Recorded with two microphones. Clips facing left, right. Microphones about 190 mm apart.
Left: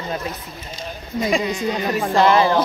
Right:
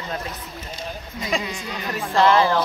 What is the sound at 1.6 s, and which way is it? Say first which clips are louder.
Speech: left 9 dB; 45° left (ahead or behind).